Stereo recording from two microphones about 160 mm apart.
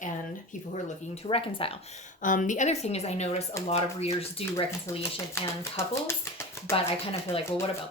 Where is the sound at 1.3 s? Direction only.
35° left (ahead or behind).